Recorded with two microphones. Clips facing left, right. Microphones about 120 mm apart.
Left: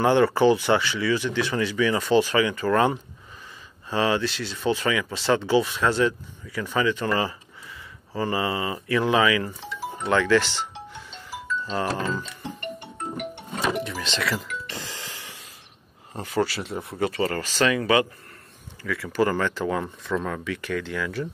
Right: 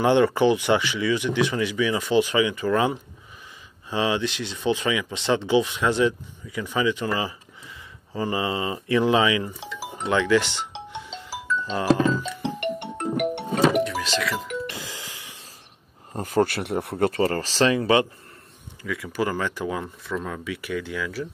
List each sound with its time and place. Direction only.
0.0 s speech: 15° right (ahead or behind)
3.9 s speech: 15° right (ahead or behind)
10.7 s music: 90° right
11.6 s speech: 20° right (ahead or behind)
12.4 s music: 75° right (ahead or behind)
13.8 s music: centre (ahead or behind)
14.9 s snort: 15° right (ahead or behind)
16.2 s speech: 45° right (ahead or behind)
17.2 s speech: 35° right (ahead or behind)
18.8 s speech: 15° right (ahead or behind)